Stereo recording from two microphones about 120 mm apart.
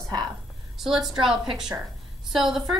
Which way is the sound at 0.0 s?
35° right (ahead or behind).